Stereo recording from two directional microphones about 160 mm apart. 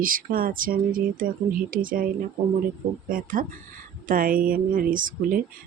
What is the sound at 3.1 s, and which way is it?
Speech, 60° right (ahead or behind).